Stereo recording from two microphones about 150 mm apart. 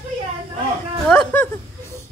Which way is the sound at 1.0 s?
10° left (ahead or behind).